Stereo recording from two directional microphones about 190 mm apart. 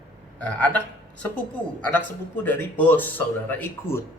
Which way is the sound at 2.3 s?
10° left (ahead or behind).